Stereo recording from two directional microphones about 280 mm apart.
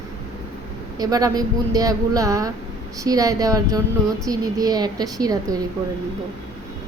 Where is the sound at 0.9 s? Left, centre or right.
Centre.